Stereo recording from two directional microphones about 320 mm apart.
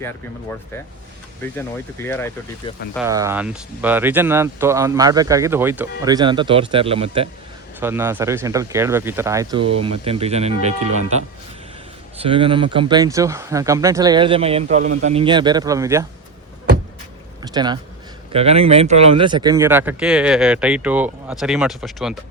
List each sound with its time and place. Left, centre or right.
1.4 s speech: centre
3.0 s speech: centre
12.1 s speech: centre
17.4 s speech: centre